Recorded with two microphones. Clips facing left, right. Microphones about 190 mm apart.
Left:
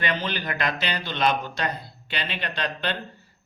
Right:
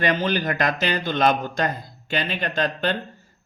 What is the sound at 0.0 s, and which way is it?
Speech, 45° right (ahead or behind).